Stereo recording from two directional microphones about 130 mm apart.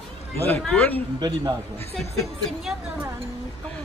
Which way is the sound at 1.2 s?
30° right (ahead or behind).